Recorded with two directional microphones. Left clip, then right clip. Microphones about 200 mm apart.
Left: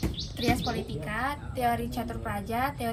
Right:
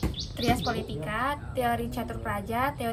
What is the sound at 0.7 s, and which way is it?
A woman's voice, 5° right (ahead or behind).